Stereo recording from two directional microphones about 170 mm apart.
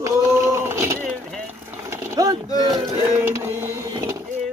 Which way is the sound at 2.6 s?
25° right (ahead or behind).